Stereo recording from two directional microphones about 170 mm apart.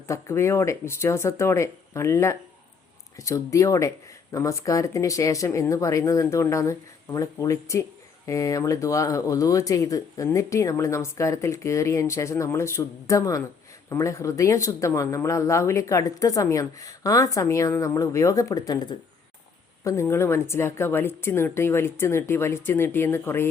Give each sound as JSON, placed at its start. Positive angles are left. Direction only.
{"t": 0.1, "sound": "a woman's voice", "side_deg": 15}